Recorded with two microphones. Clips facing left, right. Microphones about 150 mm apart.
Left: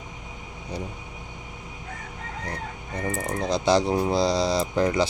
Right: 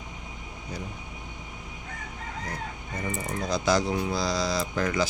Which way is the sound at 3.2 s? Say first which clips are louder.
Left 3 dB; 30° left (ahead or behind).